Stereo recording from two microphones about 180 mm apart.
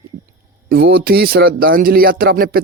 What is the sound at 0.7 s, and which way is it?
Speech, 65° right (ahead or behind).